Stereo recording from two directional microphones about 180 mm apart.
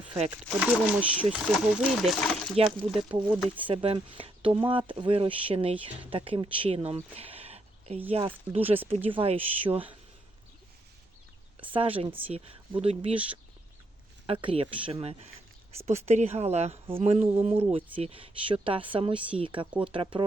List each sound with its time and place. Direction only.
0.6 s speech: 10° right (ahead or behind)
3.7 s speech: 25° right (ahead or behind)
11.6 s speech: 30° right (ahead or behind)
14.3 s speech: 30° right (ahead or behind)